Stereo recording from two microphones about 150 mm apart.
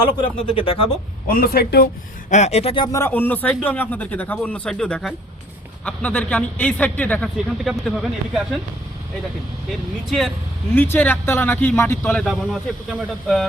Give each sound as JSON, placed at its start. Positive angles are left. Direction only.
{"t": 0.2, "sound": "speech", "side_deg": 35}
{"t": 1.3, "sound": "a man's voice", "side_deg": 85}
{"t": 2.3, "sound": "speech", "side_deg": 45}
{"t": 2.9, "sound": "a man's voice", "side_deg": 15}
{"t": 7.3, "sound": "speech", "side_deg": -5}
{"t": 9.6, "sound": "speech", "side_deg": 0}
{"t": 10.8, "sound": "a man's voice", "side_deg": 15}